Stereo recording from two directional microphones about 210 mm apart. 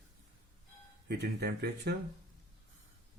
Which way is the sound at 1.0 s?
50° right (ahead or behind).